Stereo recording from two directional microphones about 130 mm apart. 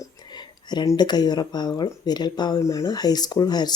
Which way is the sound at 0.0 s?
35° left (ahead or behind).